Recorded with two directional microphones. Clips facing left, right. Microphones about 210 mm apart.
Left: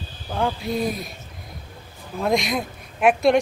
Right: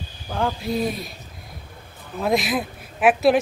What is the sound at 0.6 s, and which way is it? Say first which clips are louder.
Speech: even; centre (ahead or behind).